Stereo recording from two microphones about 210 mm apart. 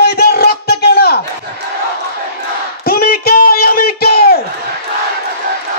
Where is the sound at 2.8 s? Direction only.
45° left (ahead or behind).